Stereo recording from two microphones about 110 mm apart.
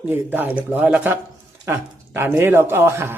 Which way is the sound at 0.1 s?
15° right (ahead or behind).